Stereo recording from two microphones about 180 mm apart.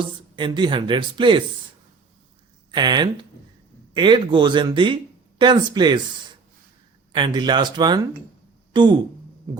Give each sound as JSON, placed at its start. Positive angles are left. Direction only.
{"t": 0.3, "sound": "speech", "side_deg": -25}
{"t": 2.7, "sound": "speech", "side_deg": -25}
{"t": 9.5, "sound": "hum", "side_deg": -15}